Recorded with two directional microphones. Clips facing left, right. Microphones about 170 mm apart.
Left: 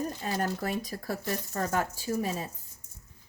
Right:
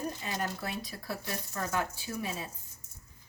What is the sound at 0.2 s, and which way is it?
Speech, 40° left (ahead or behind).